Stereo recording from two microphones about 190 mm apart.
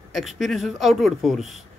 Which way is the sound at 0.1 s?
Centre (ahead or behind).